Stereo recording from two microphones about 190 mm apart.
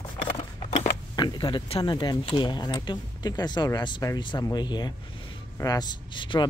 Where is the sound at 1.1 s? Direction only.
25° left (ahead or behind).